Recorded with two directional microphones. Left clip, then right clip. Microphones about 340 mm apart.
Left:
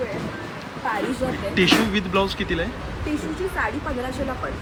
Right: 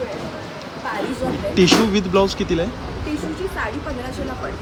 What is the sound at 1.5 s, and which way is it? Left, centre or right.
Speech, centre.